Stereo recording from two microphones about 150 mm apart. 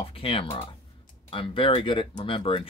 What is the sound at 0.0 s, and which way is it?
Speech, 35° left (ahead or behind).